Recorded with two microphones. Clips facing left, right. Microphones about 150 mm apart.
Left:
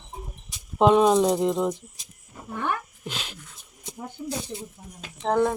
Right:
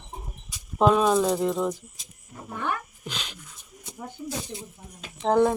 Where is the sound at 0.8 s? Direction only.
25° left (ahead or behind).